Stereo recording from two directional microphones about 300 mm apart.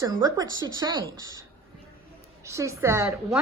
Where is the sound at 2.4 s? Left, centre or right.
Centre.